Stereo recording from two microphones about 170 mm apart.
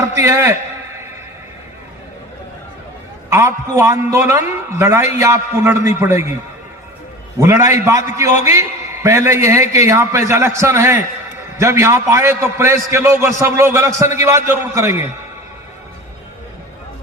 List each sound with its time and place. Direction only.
0.0 s a man's voice: 15° right (ahead or behind)
3.2 s a man's voice: 15° right (ahead or behind)
7.3 s a man's voice: 15° right (ahead or behind)
9.0 s a man's voice: 15° right (ahead or behind)